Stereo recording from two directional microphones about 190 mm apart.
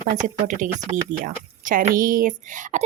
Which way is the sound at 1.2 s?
45° right (ahead or behind).